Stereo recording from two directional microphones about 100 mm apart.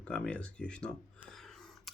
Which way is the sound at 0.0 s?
10° left (ahead or behind).